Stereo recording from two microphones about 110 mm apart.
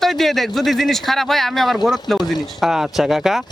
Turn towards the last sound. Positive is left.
turn(degrees=0)  # may be behind; listen again after turning